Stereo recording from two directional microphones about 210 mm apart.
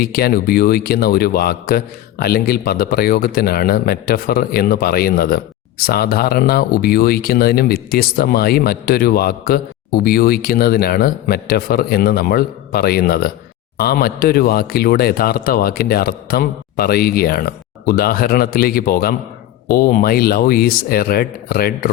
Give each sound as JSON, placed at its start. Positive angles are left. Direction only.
{"t": 0.0, "sound": "a man's voice", "side_deg": 45}